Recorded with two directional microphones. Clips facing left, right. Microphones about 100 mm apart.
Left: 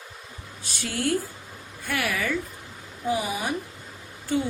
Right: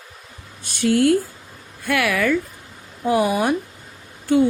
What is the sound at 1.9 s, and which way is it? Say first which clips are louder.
A woman's voice: right 8 dB; 75° right (ahead or behind).